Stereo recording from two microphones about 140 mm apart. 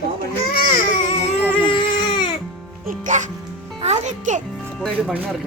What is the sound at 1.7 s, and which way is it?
Baby cry, 35° left (ahead or behind).